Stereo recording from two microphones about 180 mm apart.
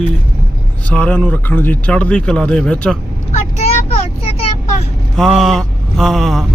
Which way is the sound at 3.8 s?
35° left (ahead or behind).